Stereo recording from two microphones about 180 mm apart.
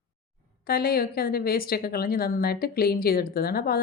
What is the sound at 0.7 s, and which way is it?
A woman's voice, 55° left (ahead or behind).